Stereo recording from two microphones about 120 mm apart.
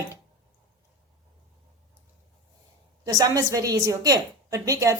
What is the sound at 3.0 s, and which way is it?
A woman's voice, 30° right (ahead or behind).